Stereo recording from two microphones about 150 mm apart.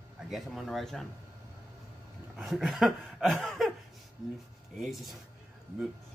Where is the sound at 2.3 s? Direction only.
Centre (ahead or behind).